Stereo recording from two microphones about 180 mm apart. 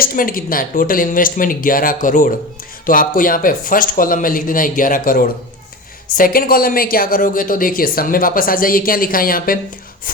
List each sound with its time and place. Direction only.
0.0 s speech: 50° left (ahead or behind)